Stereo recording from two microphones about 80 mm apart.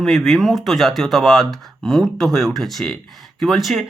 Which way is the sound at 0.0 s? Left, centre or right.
Centre.